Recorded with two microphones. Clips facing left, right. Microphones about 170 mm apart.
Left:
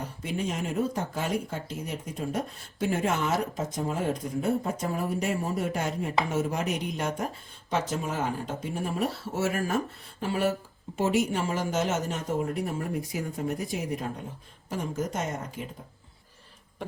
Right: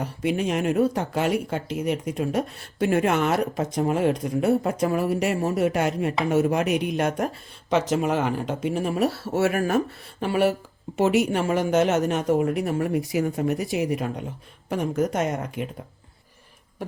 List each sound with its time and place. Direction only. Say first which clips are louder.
0.0 s speech: right 7 dB; 75° right (ahead or behind)
7.7 s speech: right 8 dB; 80° right
14.7 s speech: right 7 dB; 70° right (ahead or behind)